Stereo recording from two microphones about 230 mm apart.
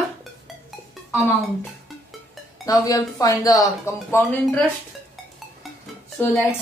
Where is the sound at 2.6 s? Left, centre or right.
Centre.